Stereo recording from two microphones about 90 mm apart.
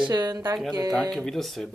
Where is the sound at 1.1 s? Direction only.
5° left (ahead or behind).